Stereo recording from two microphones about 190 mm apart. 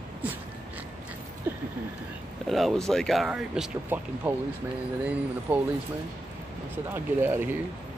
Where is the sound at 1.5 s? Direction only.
10° right (ahead or behind).